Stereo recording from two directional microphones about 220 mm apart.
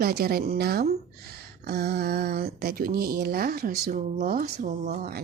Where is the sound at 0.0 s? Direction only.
45° right (ahead or behind).